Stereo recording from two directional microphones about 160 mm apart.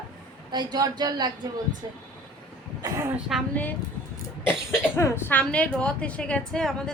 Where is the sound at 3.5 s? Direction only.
10° left (ahead or behind).